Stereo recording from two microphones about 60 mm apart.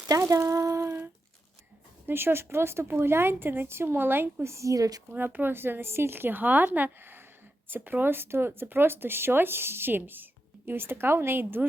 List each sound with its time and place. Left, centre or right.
0.2 s a sound: right
2.0 s speech: right
4.5 s a woman's voice: right
5.1 s speech: right